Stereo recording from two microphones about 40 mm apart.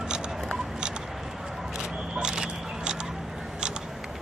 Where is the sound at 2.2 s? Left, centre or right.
Right.